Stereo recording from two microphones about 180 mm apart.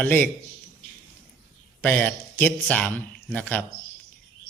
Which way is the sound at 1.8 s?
10° left (ahead or behind).